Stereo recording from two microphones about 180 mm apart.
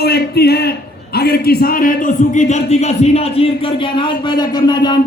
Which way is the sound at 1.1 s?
60° left (ahead or behind).